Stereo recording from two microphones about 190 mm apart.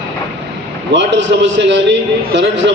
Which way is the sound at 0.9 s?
70° right (ahead or behind).